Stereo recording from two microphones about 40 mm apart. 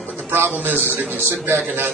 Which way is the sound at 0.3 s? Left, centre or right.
Right.